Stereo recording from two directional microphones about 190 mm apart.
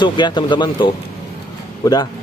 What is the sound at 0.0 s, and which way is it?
Speech, 25° left (ahead or behind).